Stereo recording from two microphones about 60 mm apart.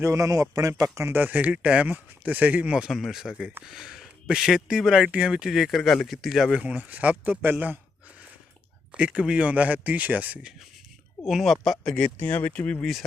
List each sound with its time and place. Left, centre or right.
0.0 s speech: right
0.8 s speech: right
1.1 s speech: right; by 1.9 s centre
1.9 s speech: right
2.9 s speech: centre
6.7 s a man's voice: right
8.9 s speech: centre
11.3 s speech: centre
11.9 s speech: centre
12.8 s speech: centre